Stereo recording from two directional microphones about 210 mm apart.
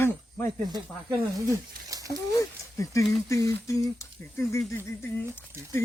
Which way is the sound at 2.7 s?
15° left (ahead or behind).